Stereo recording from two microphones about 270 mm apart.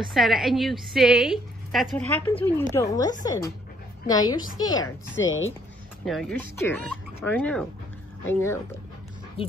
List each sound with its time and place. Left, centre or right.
0.1 s a woman's voice: centre
5.1 s speech: left
6.0 s a woman's voice: centre